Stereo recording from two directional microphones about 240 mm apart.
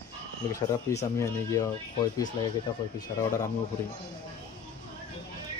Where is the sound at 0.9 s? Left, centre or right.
Centre.